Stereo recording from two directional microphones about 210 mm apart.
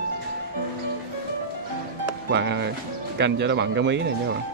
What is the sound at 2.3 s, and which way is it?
Speech, 55° right (ahead or behind).